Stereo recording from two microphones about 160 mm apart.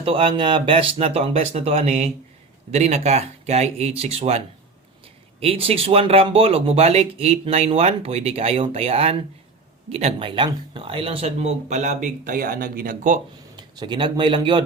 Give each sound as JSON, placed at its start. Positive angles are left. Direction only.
{"t": 0.0, "sound": "speech", "side_deg": -35}
{"t": 12.0, "sound": "speech", "side_deg": -55}
{"t": 13.6, "sound": "speech", "side_deg": -30}